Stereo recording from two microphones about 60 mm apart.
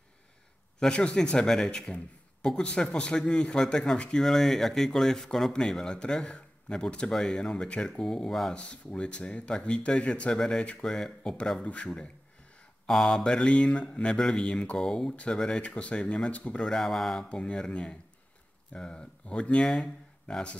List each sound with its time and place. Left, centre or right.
0.7 s speech: centre
8.5 s speech: centre
10.3 s speech: centre
10.6 s speech: left
10.9 s speech: centre
11.6 s speech: left
16.6 s speech: centre
17.3 s speech: centre